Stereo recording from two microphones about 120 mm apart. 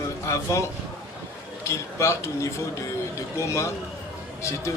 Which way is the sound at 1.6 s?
25° left (ahead or behind).